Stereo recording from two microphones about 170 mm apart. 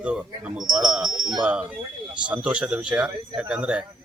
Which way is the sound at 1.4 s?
5° right (ahead or behind).